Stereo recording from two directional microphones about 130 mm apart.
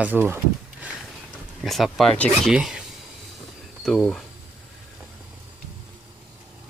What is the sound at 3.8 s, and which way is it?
Speech, 5° left (ahead or behind).